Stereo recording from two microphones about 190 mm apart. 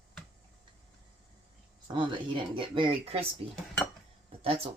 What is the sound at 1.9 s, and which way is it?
Speech, 25° right (ahead or behind).